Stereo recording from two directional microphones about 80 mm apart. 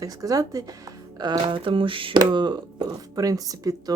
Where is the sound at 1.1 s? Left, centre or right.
Right.